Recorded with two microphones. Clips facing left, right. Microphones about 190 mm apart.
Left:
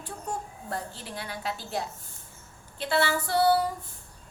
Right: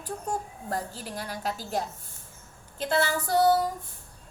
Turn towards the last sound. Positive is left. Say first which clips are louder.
# right 1 dB
turn(degrees=-45)  # may be behind; listen again after turning